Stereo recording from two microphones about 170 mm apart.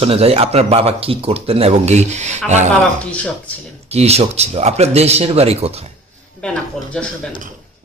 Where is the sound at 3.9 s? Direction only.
40° right (ahead or behind).